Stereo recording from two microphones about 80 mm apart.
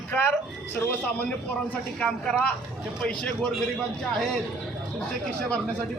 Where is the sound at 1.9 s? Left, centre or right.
Centre.